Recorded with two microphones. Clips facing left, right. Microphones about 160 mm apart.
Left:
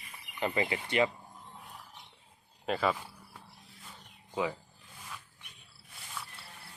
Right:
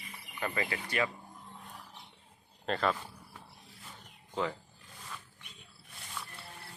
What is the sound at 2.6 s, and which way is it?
Speech, 5° left (ahead or behind).